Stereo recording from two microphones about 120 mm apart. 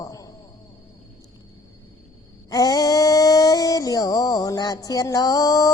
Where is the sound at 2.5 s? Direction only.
30° left (ahead or behind).